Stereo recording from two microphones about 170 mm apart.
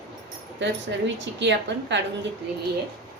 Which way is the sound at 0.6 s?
90° right.